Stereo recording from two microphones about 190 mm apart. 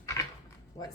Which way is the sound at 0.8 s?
20° left (ahead or behind).